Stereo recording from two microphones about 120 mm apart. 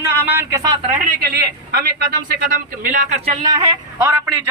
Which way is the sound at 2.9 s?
80° right.